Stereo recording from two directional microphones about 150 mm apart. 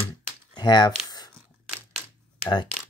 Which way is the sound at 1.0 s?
25° left (ahead or behind).